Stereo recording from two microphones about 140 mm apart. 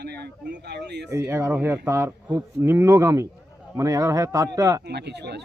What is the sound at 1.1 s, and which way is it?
A man's voice, 20° right (ahead or behind).